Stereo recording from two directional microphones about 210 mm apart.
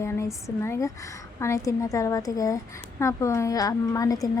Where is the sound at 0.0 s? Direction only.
15° left (ahead or behind).